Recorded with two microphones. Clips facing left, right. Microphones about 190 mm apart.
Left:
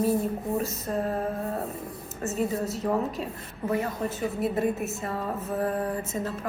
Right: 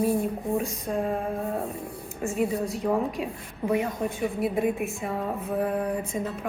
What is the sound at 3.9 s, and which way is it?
Speech, 10° right (ahead or behind).